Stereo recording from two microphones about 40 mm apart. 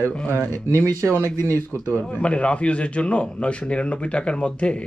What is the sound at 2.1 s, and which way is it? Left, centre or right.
A man's voice, left.